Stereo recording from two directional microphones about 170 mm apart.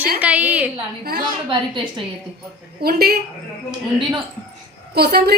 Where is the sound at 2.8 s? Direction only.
65° right (ahead or behind).